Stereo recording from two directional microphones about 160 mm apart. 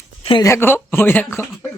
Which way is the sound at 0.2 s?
35° left (ahead or behind).